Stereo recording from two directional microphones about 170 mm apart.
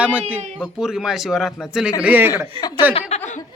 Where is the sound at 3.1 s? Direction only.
40° left (ahead or behind).